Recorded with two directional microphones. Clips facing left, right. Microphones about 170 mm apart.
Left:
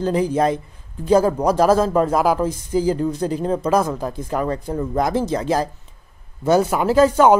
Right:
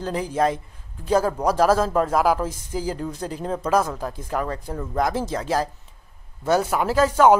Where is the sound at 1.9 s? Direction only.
10° left (ahead or behind).